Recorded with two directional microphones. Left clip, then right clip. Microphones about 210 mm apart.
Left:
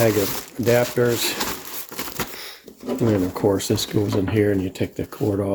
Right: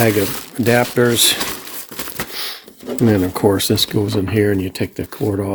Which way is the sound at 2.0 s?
5° right (ahead or behind).